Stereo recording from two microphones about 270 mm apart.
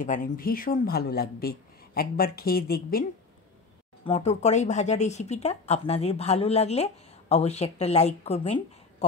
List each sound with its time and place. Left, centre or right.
0.0 s speech: left
4.0 s speech: left